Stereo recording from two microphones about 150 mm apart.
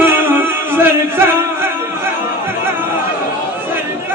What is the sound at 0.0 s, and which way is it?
Music, 15° right (ahead or behind).